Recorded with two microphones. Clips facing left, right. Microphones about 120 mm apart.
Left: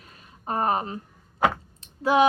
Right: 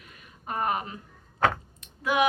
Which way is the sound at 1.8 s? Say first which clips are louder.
Left 7 dB; 30° left (ahead or behind).